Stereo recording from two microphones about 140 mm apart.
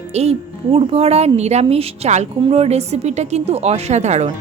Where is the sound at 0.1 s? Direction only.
50° right (ahead or behind).